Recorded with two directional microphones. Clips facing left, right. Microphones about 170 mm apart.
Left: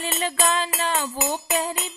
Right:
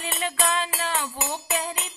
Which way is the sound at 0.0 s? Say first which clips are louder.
Left 3 dB; 35° left (ahead or behind).